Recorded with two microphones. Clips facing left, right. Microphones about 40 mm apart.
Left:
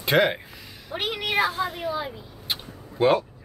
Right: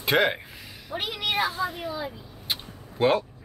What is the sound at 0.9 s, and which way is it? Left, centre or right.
Speech, left.